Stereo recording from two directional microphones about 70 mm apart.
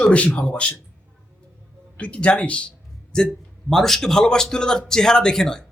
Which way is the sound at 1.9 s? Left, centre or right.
Centre.